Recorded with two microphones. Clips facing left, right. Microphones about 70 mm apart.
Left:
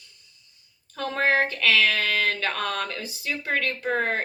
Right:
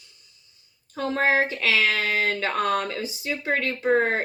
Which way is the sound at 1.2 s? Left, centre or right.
Centre.